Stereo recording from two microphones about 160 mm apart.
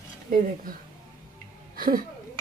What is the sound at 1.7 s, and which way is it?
Speech, 65° right (ahead or behind).